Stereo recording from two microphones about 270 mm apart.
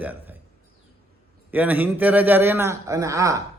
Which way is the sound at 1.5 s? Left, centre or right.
Centre.